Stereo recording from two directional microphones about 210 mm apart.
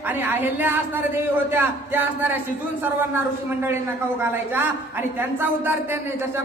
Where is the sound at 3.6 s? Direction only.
10° right (ahead or behind).